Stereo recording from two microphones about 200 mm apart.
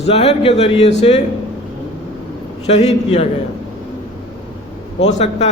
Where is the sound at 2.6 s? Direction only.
30° left (ahead or behind).